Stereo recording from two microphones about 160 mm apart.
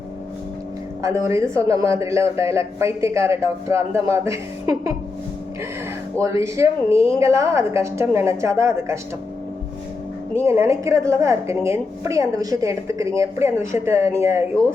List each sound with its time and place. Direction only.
1.0 s a woman's voice: 20° right (ahead or behind)
6.2 s a woman's voice: 20° right (ahead or behind)
10.3 s a woman's voice: 15° right (ahead or behind)